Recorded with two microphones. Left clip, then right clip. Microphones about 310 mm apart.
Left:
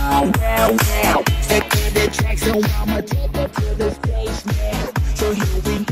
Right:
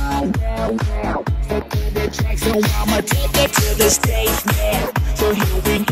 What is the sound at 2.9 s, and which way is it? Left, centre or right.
Music, right.